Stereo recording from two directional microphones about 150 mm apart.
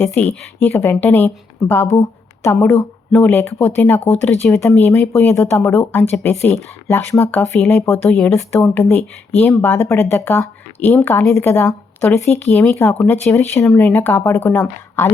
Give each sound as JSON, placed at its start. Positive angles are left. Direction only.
{"t": 0.6, "sound": "speech", "side_deg": 15}
{"t": 7.6, "sound": "speech", "side_deg": 0}